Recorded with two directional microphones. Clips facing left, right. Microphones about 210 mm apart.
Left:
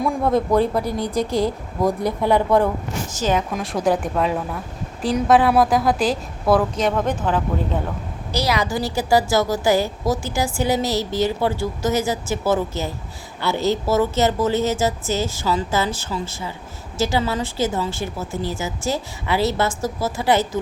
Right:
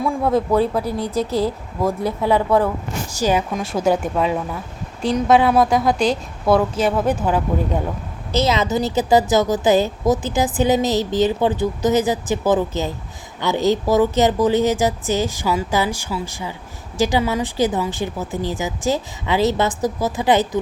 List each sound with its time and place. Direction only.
0.0 s speech: 5° right (ahead or behind)
0.9 s a woman's voice: 30° right (ahead or behind)
1.2 s a woman's voice: 5° right (ahead or behind)
8.3 s a woman's voice: 20° right (ahead or behind)